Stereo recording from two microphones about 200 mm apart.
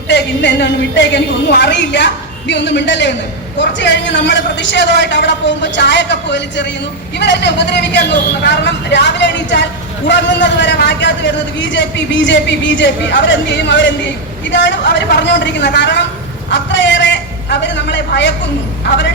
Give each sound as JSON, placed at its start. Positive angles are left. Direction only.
{"t": 0.1, "sound": "a man's voice", "side_deg": 60}